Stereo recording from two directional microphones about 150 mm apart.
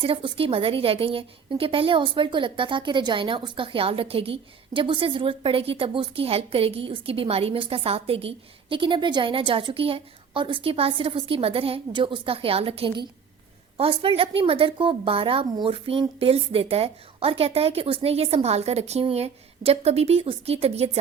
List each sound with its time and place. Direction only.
0.0 s a woman's voice: 35° right (ahead or behind)